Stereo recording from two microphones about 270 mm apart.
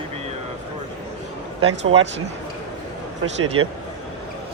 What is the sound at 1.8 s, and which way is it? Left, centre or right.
Speech, right.